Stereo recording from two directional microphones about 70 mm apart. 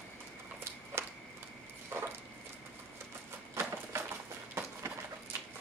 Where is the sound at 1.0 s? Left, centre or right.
Right.